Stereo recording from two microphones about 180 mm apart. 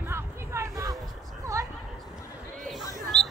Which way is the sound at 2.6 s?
Centre (ahead or behind).